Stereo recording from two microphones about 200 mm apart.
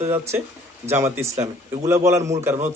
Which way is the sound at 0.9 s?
15° right (ahead or behind).